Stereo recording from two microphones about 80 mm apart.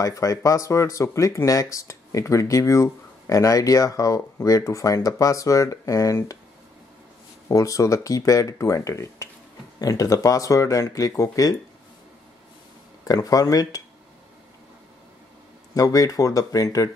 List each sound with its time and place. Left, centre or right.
0.0 s speech: left
7.4 s speech: left
13.0 s speech: left
15.7 s speech: left